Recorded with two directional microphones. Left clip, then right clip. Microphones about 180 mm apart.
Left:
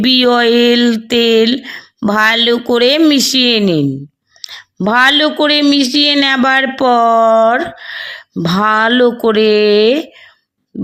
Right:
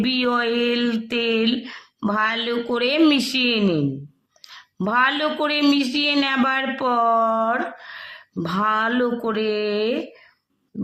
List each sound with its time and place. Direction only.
0.0 s speech: 35° left (ahead or behind)